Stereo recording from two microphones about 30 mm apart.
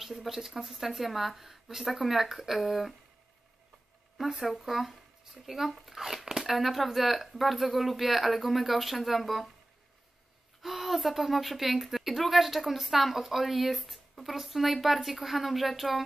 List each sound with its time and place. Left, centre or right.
0.0 s speech: centre
4.2 s speech: centre
10.6 s speech: centre